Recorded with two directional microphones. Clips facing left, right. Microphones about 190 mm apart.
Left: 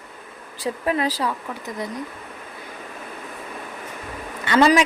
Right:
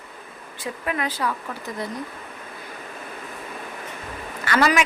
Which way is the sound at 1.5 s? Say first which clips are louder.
Left 1 dB; 15° left (ahead or behind).